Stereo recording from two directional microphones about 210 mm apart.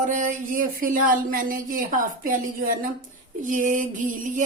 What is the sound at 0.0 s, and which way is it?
Speech, 35° right (ahead or behind).